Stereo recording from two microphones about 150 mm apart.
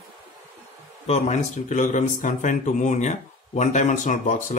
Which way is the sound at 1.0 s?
45° left (ahead or behind).